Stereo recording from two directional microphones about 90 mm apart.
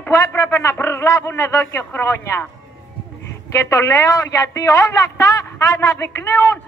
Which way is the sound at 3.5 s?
35° left (ahead or behind).